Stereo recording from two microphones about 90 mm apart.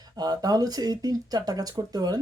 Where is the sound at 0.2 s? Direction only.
45° right (ahead or behind).